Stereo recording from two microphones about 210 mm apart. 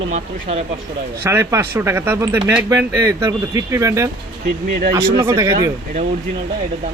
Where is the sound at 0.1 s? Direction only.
30° right (ahead or behind).